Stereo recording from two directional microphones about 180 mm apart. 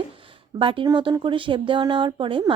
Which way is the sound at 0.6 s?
30° right (ahead or behind).